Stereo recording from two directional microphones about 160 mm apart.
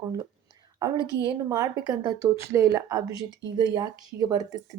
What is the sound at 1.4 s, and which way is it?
Speech, 20° right (ahead or behind).